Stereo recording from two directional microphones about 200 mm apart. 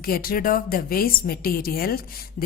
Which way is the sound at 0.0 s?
45° left (ahead or behind).